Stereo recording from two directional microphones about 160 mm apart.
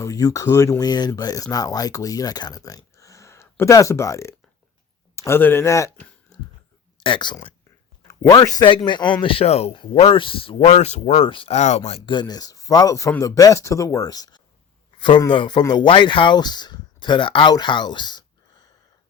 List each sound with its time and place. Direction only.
0.0 s speech: 20° left (ahead or behind)
7.0 s a man's voice: 30° left (ahead or behind)
11.9 s speech: 35° left (ahead or behind)